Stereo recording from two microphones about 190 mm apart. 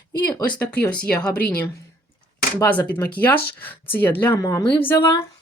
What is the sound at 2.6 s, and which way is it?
Speech, 10° left (ahead or behind).